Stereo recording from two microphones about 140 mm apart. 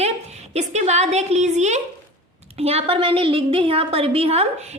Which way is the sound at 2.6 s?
45° right (ahead or behind).